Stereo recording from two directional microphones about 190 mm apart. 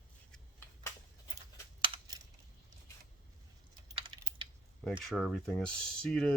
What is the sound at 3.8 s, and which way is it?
Typing, 25° right (ahead or behind).